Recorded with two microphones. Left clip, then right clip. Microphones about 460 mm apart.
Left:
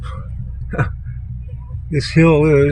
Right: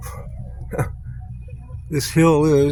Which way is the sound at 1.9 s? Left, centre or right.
Right.